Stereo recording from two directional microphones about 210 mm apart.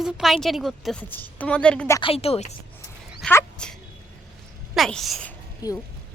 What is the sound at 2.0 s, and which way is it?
Speech, 25° left (ahead or behind).